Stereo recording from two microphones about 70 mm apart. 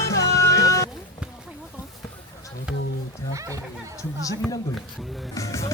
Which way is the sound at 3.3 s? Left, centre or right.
Right.